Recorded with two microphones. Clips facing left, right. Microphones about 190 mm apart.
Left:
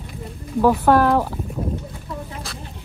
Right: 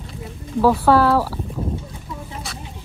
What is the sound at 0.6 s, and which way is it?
Speech, 15° left (ahead or behind).